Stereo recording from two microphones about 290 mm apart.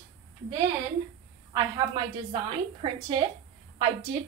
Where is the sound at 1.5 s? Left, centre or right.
Centre.